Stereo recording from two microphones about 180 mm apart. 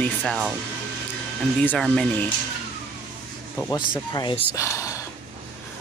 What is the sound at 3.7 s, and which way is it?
Speech, 20° left (ahead or behind).